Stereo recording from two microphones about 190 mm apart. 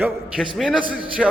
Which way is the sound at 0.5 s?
5° right (ahead or behind).